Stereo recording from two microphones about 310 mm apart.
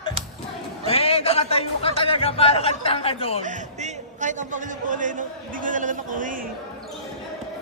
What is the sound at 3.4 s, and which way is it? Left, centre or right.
A man's voice, right.